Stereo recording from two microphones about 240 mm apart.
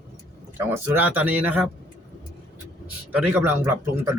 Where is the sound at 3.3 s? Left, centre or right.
Centre.